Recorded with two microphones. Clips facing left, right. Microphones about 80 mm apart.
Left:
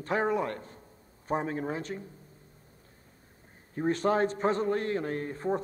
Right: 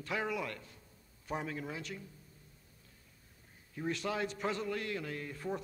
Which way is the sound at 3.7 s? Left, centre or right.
Left.